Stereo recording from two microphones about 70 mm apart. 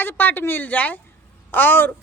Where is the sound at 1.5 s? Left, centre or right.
Left.